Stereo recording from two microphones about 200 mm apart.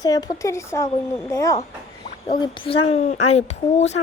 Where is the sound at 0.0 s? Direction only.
20° left (ahead or behind).